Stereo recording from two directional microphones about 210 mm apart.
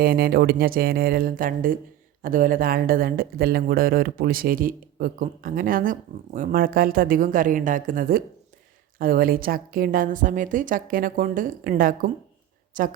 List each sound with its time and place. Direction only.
0.0 s a woman's voice: 45° right (ahead or behind)